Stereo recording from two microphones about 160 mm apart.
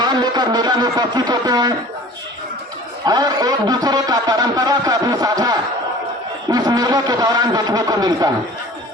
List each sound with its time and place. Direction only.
0.0 s speech: 25° right (ahead or behind)
3.1 s a man's voice: 25° right (ahead or behind)